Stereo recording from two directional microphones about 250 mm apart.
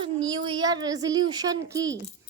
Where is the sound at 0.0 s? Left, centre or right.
Centre.